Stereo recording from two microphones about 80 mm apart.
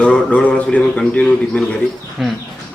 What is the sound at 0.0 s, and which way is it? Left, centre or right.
A man's voice, centre.